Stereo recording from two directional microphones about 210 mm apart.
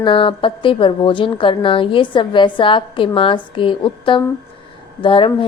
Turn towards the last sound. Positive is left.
turn(degrees=25)  # may be behind; listen again after turning